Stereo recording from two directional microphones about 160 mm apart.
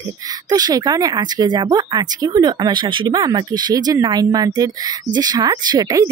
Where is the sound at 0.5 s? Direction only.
25° right (ahead or behind).